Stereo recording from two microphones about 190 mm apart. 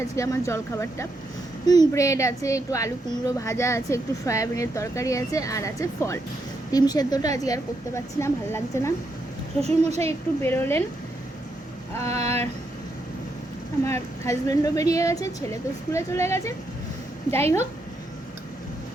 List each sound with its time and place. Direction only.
0.2 s a woman's voice: 15° left (ahead or behind)
9.6 s a child's voice: 35° right (ahead or behind)
10.1 s a woman's voice: 10° left (ahead or behind)
12.1 s a child's voice: 35° right (ahead or behind)
13.8 s a woman's voice: 15° left (ahead or behind)